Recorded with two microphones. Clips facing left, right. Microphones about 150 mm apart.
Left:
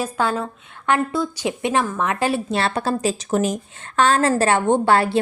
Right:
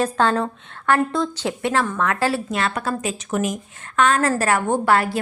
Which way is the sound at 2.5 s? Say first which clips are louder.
Left 2 dB; 30° left (ahead or behind).